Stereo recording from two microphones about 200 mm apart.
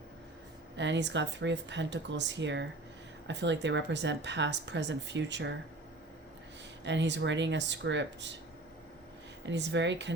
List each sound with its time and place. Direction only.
0.8 s speech: 60° right (ahead or behind)
6.8 s speech: 60° right (ahead or behind)
9.5 s speech: 60° right (ahead or behind)